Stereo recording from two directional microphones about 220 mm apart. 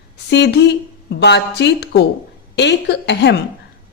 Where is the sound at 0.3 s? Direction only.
50° left (ahead or behind).